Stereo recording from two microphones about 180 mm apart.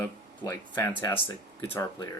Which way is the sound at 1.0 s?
25° left (ahead or behind).